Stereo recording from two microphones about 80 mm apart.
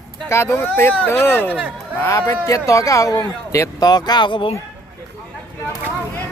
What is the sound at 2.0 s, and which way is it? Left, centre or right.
Speech, left.